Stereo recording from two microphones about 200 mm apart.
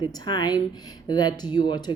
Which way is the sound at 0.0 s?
20° left (ahead or behind).